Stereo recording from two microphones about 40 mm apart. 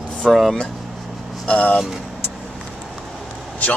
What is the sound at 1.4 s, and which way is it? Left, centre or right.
Speech, left.